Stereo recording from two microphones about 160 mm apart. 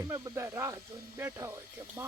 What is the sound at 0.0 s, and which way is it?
Speech, 15° right (ahead or behind).